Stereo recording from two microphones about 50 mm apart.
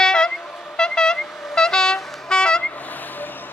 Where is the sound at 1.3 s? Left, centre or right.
Centre.